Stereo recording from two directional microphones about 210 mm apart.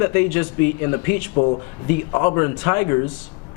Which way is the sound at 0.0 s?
10° left (ahead or behind).